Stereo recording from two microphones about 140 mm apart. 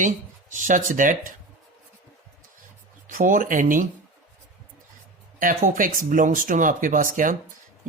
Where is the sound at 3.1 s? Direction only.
70° right (ahead or behind).